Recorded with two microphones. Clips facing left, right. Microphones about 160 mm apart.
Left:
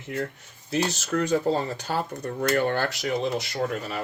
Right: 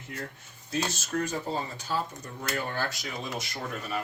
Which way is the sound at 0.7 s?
70° left (ahead or behind).